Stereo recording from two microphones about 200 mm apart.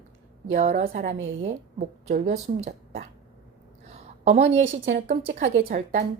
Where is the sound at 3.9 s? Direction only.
35° right (ahead or behind).